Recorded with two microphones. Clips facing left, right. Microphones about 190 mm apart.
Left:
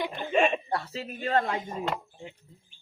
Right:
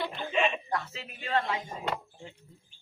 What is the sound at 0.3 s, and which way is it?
Chuckle, 45° left (ahead or behind).